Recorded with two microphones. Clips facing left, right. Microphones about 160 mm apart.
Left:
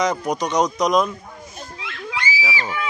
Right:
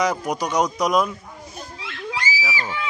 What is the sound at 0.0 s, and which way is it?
Speech, 10° right (ahead or behind).